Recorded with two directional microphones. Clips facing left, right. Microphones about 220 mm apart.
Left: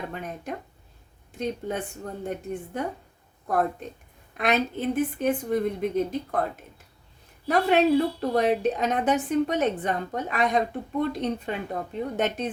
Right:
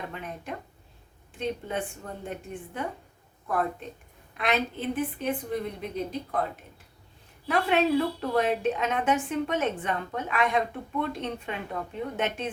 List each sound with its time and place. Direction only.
0.1 s a woman's voice: 45° left (ahead or behind)
7.4 s a woman's voice: 40° left (ahead or behind)